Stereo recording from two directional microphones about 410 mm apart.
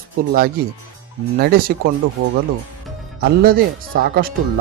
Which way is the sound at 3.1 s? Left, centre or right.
Right.